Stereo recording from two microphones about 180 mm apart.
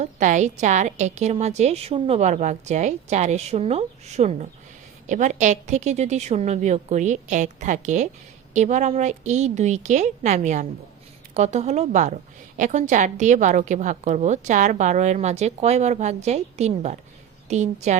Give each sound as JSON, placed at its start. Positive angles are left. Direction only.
{"t": 0.0, "sound": "a woman's voice", "side_deg": -40}